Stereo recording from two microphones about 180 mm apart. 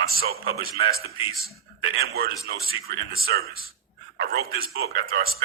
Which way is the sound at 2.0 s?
55° right (ahead or behind).